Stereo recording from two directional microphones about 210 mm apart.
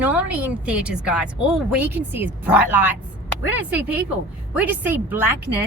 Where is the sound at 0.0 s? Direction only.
5° right (ahead or behind).